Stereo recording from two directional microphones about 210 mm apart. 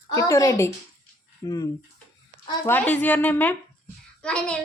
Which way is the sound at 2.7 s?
5° left (ahead or behind).